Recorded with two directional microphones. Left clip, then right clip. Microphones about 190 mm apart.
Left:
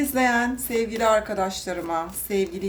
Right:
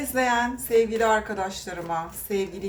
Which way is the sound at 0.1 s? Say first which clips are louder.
Right 2 dB; 35° left (ahead or behind).